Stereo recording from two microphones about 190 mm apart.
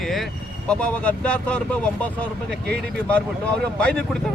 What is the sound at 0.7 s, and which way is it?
Speech, 5° left (ahead or behind).